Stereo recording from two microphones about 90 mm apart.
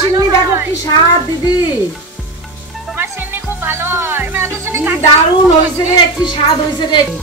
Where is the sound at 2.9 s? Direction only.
25° right (ahead or behind).